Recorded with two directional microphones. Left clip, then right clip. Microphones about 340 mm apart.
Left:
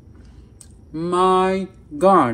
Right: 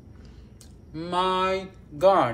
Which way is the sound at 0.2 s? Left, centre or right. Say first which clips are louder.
Left 2 dB; centre.